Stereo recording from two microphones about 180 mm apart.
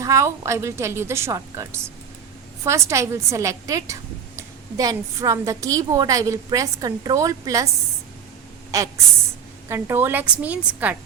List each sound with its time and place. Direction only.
0.0 s a woman's voice: 15° right (ahead or behind)
8.7 s a woman's voice: 20° right (ahead or behind)